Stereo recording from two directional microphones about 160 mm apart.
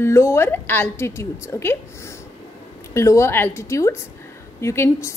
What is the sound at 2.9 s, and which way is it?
A woman's voice, 20° left (ahead or behind).